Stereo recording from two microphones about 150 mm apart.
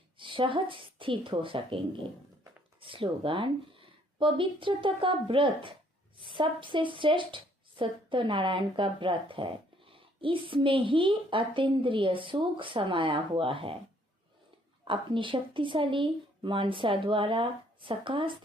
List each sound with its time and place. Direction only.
0.2 s speech: 35° right (ahead or behind)
2.8 s speech: 35° right (ahead or behind)
14.8 s speech: 35° right (ahead or behind)